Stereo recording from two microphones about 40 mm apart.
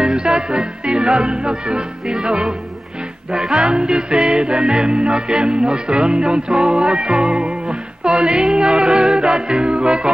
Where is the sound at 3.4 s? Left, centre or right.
Right.